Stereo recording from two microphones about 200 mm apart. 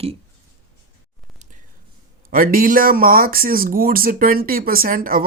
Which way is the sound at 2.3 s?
45° right (ahead or behind).